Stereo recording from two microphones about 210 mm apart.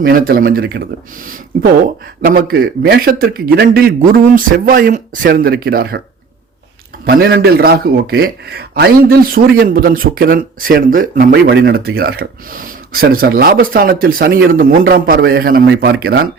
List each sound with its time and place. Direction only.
0.0 s a man's voice: 45° right (ahead or behind)
2.2 s a man's voice: 45° right (ahead or behind)
7.0 s a man's voice: 45° right (ahead or behind)